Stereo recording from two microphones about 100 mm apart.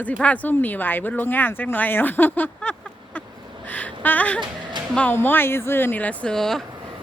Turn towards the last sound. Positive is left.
turn(degrees=5)  # may be behind; listen again after turning